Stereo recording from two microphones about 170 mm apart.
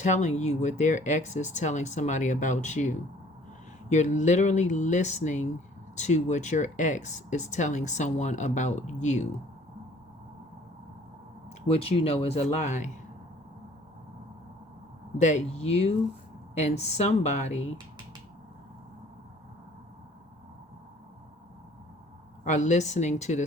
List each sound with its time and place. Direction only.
0.0 s speech: 45° left (ahead or behind)
11.7 s speech: 35° left (ahead or behind)
15.2 s speech: 45° left (ahead or behind)
22.4 s speech: 45° left (ahead or behind)